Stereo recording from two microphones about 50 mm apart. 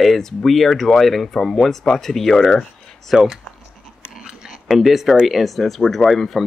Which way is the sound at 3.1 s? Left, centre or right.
Centre.